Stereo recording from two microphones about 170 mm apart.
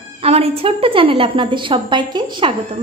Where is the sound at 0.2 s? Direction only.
35° right (ahead or behind).